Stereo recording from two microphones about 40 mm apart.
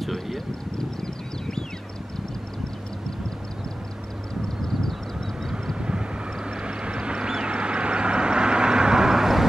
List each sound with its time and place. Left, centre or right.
0.0 s vehicle: centre
0.7 s a sound: centre
4.6 s vehicle: centre
5.8 s vehicle: right